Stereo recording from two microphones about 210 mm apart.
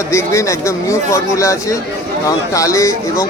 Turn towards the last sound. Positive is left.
turn(degrees=15)  # may be behind; listen again after turning